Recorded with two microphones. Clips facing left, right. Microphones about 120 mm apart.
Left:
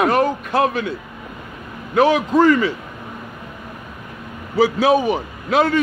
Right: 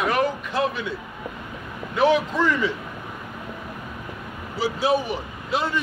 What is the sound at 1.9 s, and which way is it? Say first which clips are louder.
Speech: left 5 dB; 75° left (ahead or behind).